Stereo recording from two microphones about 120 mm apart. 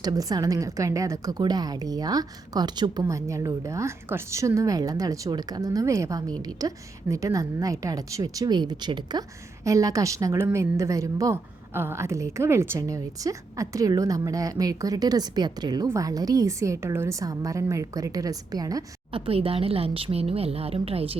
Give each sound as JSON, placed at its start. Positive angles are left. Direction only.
{"t": 0.0, "sound": "a woman's voice", "side_deg": -30}
{"t": 9.6, "sound": "a woman's voice", "side_deg": -30}
{"t": 19.1, "sound": "a woman's voice", "side_deg": -50}